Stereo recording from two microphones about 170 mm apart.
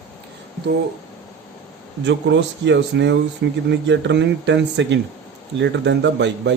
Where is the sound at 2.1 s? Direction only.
90° right.